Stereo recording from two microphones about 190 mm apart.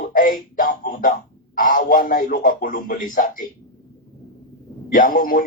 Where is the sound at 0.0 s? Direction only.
45° left (ahead or behind).